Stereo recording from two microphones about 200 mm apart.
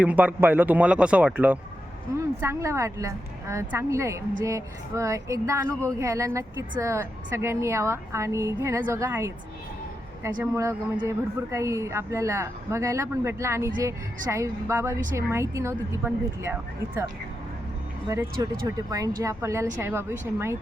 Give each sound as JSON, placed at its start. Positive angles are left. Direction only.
{"t": 0.0, "sound": "a woman's voice", "side_deg": -10}
{"t": 18.6, "sound": "a woman's voice", "side_deg": -20}